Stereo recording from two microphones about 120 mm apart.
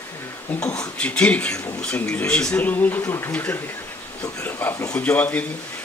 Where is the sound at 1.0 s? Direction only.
10° left (ahead or behind).